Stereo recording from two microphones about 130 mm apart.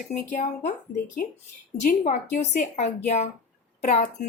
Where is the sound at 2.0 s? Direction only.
75° left (ahead or behind).